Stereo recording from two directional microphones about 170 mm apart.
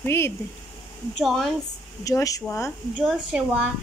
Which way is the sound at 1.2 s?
Centre (ahead or behind).